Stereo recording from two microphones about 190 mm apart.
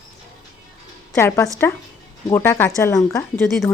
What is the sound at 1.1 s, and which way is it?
Speech, 15° left (ahead or behind).